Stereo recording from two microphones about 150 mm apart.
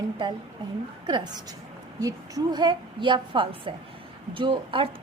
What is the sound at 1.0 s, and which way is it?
A woman's voice, 30° right (ahead or behind).